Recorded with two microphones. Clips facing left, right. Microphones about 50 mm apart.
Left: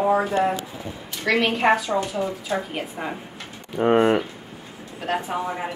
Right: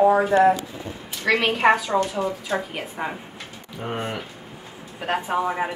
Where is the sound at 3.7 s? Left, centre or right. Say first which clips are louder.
Left 12 dB; left.